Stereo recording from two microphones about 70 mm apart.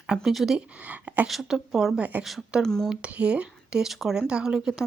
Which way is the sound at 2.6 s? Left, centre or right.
Centre.